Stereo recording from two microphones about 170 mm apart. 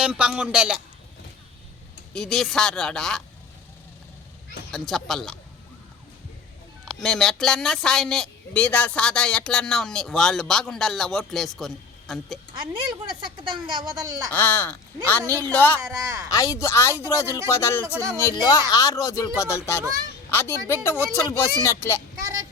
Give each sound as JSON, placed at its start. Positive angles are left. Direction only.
{"t": 0.0, "sound": "speech", "side_deg": -5}
{"t": 2.1, "sound": "speech", "side_deg": 5}
{"t": 4.7, "sound": "speech", "side_deg": 0}
{"t": 6.8, "sound": "speech", "side_deg": 0}
{"t": 12.9, "sound": "speech", "side_deg": -30}
{"t": 14.3, "sound": "speech", "side_deg": 10}
{"t": 15.8, "sound": "speech", "side_deg": -20}
{"t": 16.3, "sound": "speech", "side_deg": 20}